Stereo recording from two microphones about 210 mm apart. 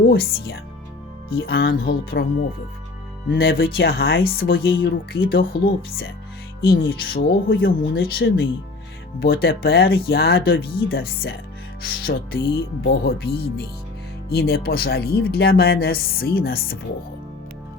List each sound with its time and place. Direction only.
0.1 s speech: 45° left (ahead or behind)
3.2 s speech: 50° left (ahead or behind)
6.6 s speech: 45° left (ahead or behind)